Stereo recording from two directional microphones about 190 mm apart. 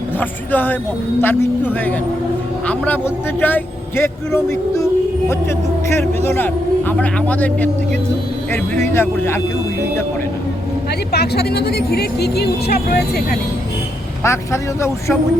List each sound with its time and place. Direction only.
0.2 s a man's voice: 10° left (ahead or behind)
6.2 s a man's voice: 10° left (ahead or behind)
8.7 s a man's voice: 15° left (ahead or behind)
11.1 s speech: 60° left (ahead or behind)
14.3 s a man's voice: 15° left (ahead or behind)